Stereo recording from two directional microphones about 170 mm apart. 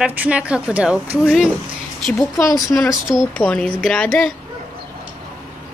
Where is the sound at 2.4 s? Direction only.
20° left (ahead or behind).